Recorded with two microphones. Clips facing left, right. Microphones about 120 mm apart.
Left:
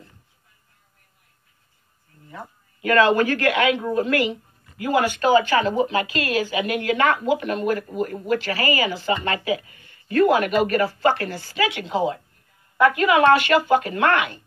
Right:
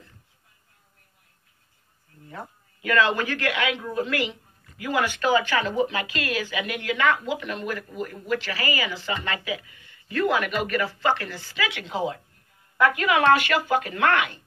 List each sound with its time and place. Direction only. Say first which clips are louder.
2.8 s a woman's voice: left 5 dB; 45° left (ahead or behind)